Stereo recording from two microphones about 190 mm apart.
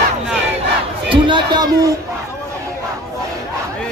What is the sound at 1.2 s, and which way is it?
Speech, 25° right (ahead or behind).